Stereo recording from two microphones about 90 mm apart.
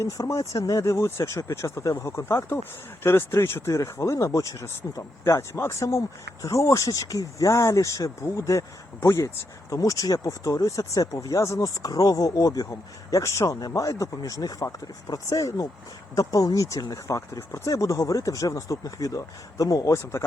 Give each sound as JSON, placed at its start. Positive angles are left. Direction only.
{"t": 0.0, "sound": "speech", "side_deg": 35}